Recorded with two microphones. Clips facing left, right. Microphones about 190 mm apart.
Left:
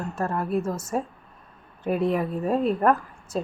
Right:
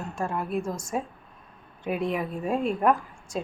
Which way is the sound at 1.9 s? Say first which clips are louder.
Left 4 dB; 35° left (ahead or behind).